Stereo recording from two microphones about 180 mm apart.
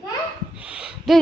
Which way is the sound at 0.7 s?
5° right (ahead or behind).